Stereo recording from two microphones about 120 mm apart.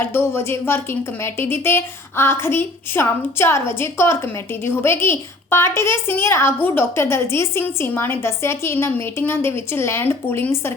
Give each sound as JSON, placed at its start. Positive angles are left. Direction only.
{"t": 0.0, "sound": "a woman's voice", "side_deg": 20}